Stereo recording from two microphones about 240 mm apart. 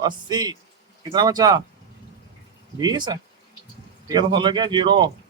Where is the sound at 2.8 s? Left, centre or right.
Centre.